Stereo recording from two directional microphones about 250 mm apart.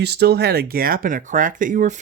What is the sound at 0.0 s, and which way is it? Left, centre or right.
Speech, right.